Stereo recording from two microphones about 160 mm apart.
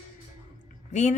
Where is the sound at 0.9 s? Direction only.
50° left (ahead or behind).